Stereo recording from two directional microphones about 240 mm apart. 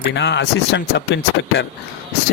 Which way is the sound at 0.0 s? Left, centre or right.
Left.